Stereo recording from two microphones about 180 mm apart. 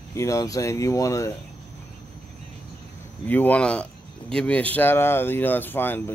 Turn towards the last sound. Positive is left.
turn(degrees=10)  # may be behind; listen again after turning